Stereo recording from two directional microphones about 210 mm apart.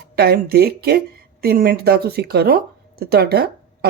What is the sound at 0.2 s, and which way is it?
Speech, 50° right (ahead or behind).